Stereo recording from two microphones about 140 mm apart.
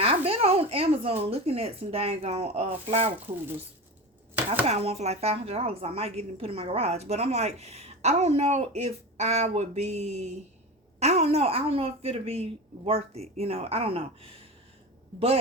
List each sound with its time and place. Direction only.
0.0 s speech: 45° right (ahead or behind)
4.6 s speech: 50° right (ahead or behind)